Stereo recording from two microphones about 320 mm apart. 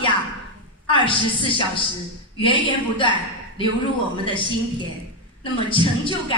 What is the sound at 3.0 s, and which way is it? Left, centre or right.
Speech, centre.